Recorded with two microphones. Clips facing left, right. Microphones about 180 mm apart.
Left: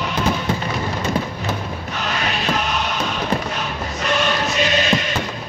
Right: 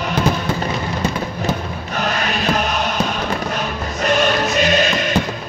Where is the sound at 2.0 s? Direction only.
45° right (ahead or behind).